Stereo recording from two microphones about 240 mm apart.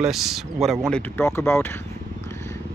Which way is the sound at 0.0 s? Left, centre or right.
Centre.